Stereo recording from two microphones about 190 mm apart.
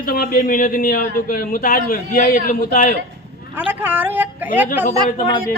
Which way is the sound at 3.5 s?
10° right (ahead or behind).